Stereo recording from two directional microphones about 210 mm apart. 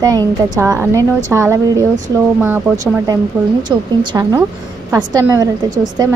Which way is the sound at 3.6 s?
20° right (ahead or behind).